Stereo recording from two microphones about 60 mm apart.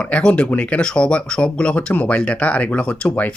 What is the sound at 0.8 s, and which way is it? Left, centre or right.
Speech, centre.